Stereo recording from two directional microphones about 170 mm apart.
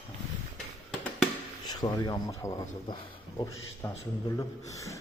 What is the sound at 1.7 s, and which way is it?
A man's voice, 25° left (ahead or behind).